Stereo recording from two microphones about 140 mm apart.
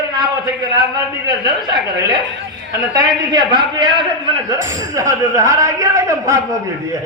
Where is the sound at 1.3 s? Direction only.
30° right (ahead or behind).